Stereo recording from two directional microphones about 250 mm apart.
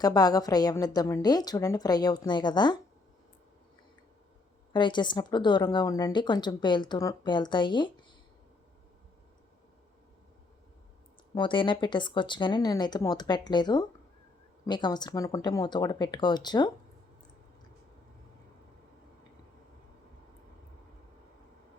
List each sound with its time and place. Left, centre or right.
0.0 s a woman's voice: centre
4.7 s a woman's voice: centre
11.3 s a woman's voice: centre